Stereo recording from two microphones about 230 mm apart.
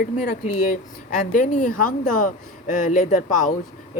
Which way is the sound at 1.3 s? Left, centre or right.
Left.